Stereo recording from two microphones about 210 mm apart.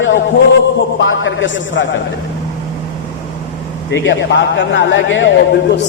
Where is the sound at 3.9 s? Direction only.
55° left (ahead or behind).